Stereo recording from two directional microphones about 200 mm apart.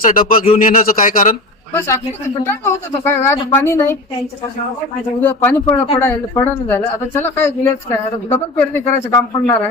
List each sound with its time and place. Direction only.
0.0 s a man's voice: 45° left (ahead or behind)
1.7 s speech: 10° left (ahead or behind)
5.2 s speech: 10° left (ahead or behind)
8.8 s a man's voice: 30° left (ahead or behind)